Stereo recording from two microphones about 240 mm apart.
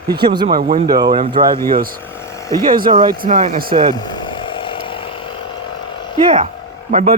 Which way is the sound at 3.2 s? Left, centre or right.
Right.